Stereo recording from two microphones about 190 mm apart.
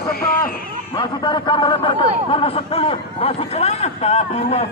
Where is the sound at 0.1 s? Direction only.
50° left (ahead or behind).